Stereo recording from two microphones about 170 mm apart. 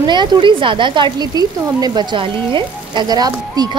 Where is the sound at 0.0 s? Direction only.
25° right (ahead or behind).